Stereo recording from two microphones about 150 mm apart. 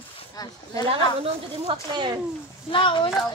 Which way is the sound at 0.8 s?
35° right (ahead or behind).